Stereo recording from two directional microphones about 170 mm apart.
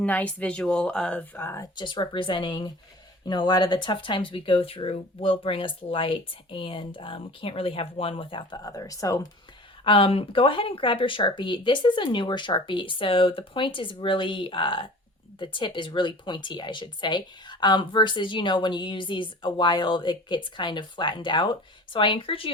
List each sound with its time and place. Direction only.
0.0 s speech: 10° left (ahead or behind)
1.7 s speech: 30° left (ahead or behind)
9.8 s speech: 30° left (ahead or behind)